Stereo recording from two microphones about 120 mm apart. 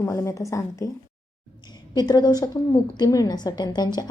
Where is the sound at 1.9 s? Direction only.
35° left (ahead or behind).